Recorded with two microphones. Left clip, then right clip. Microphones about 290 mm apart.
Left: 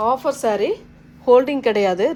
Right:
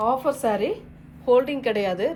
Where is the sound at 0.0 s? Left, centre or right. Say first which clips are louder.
Left 3 dB; left.